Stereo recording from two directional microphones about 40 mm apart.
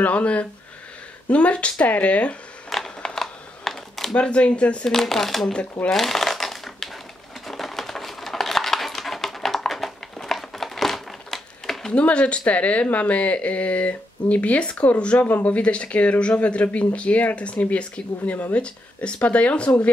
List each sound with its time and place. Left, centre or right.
0.0 s speech: left
2.7 s a sound: centre
4.1 s speech: left
4.8 s speech: centre
5.9 s crumpling: centre
7.4 s a sound: centre
10.1 s crumpling: centre
11.9 s speech: left